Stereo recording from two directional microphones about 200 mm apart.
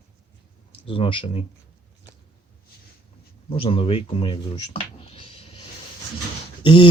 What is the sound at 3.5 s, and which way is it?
Speech, 25° left (ahead or behind).